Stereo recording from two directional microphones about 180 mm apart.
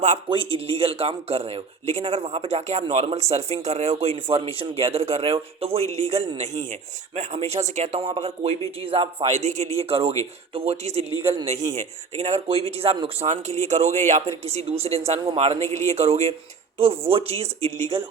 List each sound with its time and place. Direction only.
0.3 s speech: 30° right (ahead or behind)
11.2 s a man's voice: 15° right (ahead or behind)
11.7 s speech: 35° right (ahead or behind)